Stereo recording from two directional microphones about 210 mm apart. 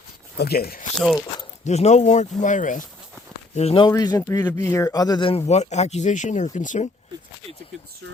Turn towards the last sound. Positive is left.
turn(degrees=35)  # may be behind; listen again after turning